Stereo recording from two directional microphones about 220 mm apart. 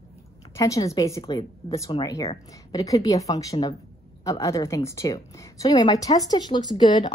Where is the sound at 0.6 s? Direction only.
15° left (ahead or behind).